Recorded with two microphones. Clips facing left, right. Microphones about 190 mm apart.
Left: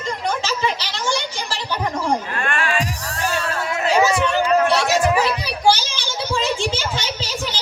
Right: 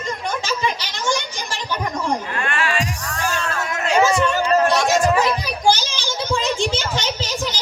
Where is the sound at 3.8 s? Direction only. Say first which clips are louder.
Right 1 dB; 10° left (ahead or behind).